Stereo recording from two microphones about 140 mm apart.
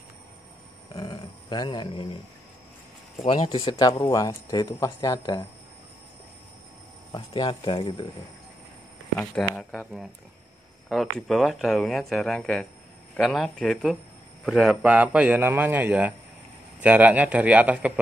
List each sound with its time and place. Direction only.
0.9 s a sound: 30° left (ahead or behind)
3.2 s speech: 40° left (ahead or behind)
7.1 s speech: 30° left (ahead or behind)
9.2 s a man's voice: 10° left (ahead or behind); by 18.0 s 10° right (ahead or behind)